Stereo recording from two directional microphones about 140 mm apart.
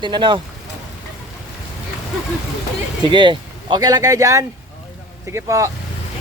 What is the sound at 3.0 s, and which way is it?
Speech, 35° right (ahead or behind).